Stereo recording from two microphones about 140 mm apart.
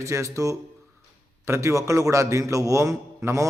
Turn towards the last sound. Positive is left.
turn(degrees=-20)  # may be behind; listen again after turning